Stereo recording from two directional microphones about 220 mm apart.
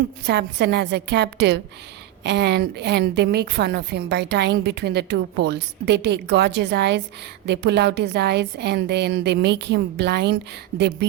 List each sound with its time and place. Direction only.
0.3 s a woman's voice: 50° right (ahead or behind)